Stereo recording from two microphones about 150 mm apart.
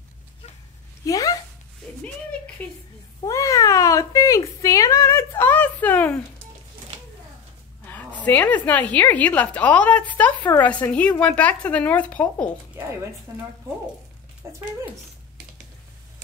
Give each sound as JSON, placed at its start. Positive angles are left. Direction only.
{"t": 1.0, "sound": "a sound", "side_deg": 25}
{"t": 2.6, "sound": "a woman's voice", "side_deg": 10}
{"t": 3.3, "sound": "cat", "side_deg": 20}
{"t": 7.9, "sound": "a woman's voice", "side_deg": 10}